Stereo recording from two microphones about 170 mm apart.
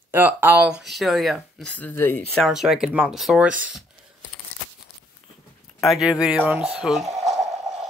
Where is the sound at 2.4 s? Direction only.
Centre (ahead or behind).